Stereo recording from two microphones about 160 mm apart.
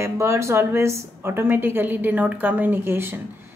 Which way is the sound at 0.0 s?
15° right (ahead or behind).